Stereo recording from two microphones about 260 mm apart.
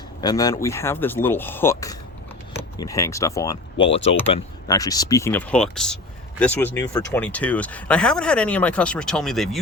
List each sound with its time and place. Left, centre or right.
0.2 s speech: centre